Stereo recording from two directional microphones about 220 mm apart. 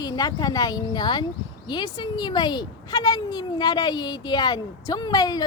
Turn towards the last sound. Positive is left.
turn(degrees=15)  # may be behind; listen again after turning